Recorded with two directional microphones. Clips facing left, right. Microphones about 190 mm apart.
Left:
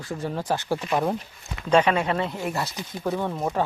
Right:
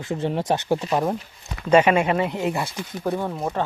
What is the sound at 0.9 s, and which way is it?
Speech, 5° right (ahead or behind).